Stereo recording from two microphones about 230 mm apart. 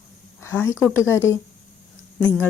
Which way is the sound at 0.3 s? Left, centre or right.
Centre.